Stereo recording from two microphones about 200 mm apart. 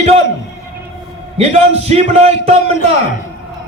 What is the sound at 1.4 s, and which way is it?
A man's voice, 30° right (ahead or behind).